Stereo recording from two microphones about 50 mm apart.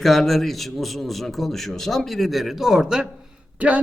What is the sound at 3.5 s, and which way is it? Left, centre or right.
Speech, right.